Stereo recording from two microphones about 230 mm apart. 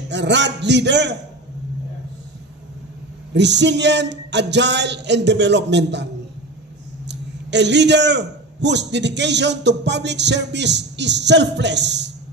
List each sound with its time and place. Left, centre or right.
0.1 s a man's voice: right
3.3 s a man's voice: right
7.1 s a man's voice: right